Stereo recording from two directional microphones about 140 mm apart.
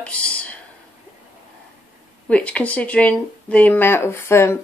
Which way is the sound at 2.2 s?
10° left (ahead or behind).